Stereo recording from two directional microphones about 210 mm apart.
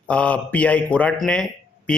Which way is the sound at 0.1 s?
5° left (ahead or behind).